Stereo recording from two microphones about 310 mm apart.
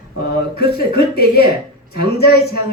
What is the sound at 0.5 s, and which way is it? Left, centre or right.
Speech, left.